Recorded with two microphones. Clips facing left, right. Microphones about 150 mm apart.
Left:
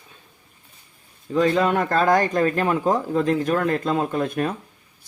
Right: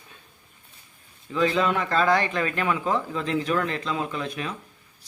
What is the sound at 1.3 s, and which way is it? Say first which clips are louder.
A man's voice: left 4 dB; 45° left (ahead or behind).